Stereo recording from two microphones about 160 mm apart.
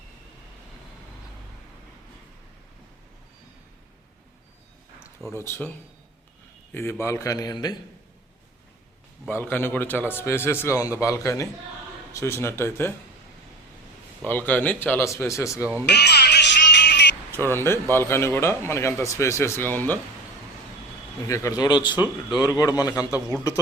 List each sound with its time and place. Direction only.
5.3 s speech: 15° left (ahead or behind)
7.0 s a man's voice: 20° left (ahead or behind)
9.3 s a man's voice: 15° left (ahead or behind)
14.3 s speech: 10° left (ahead or behind)
15.9 s music: 90° left
17.5 s speech: 15° left (ahead or behind)
21.2 s a man's voice: 20° left (ahead or behind)
21.9 s speech: 10° right (ahead or behind)
22.4 s a man's voice: 20° left (ahead or behind)